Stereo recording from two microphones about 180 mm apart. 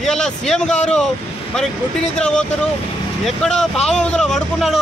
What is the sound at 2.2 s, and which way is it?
Speech, 5° left (ahead or behind).